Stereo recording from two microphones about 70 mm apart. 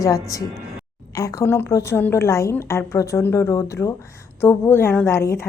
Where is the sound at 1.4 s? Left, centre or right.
Left.